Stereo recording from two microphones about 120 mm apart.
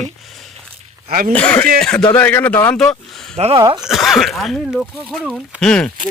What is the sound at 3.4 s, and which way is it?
Speech, 60° right (ahead or behind).